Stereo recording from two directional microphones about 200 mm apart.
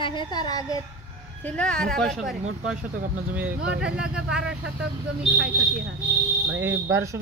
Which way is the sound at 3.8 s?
5° right (ahead or behind).